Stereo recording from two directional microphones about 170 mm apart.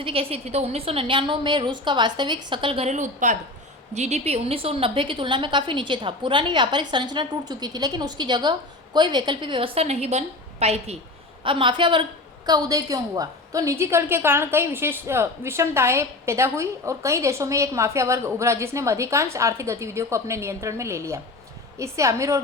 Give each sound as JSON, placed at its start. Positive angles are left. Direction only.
{"t": 0.0, "sound": "a woman's voice", "side_deg": -35}